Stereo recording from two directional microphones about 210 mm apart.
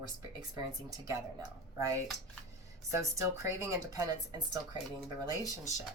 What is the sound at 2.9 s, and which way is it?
Speech, 15° right (ahead or behind).